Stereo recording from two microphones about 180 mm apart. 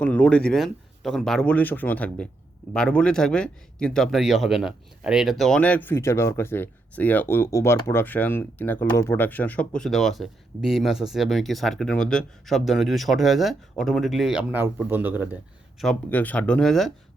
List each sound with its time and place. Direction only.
0.0 s a man's voice: 5° left (ahead or behind); by 15.4 s 10° right (ahead or behind)
15.8 s a man's voice: 5° left (ahead or behind)